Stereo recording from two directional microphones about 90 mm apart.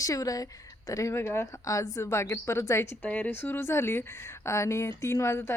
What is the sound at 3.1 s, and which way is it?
A woman's voice, 15° left (ahead or behind).